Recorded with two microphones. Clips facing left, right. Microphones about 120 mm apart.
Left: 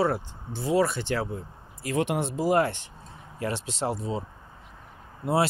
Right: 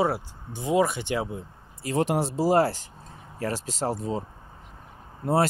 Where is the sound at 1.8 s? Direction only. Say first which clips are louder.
Right 2 dB; 35° right (ahead or behind).